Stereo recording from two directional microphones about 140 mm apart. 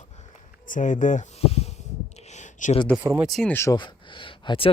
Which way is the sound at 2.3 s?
60° left (ahead or behind).